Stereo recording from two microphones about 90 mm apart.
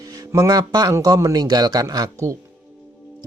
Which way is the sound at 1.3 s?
50° right (ahead or behind).